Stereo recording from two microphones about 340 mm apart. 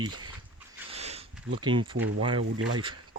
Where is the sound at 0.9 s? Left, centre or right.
Centre.